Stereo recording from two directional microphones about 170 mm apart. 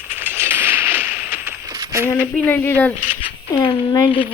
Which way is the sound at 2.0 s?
15° left (ahead or behind).